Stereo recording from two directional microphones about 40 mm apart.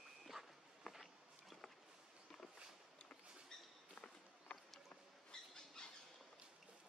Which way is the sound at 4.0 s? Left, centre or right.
Left.